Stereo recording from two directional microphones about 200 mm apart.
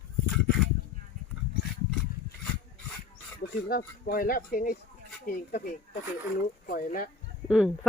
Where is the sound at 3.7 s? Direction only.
45° left (ahead or behind).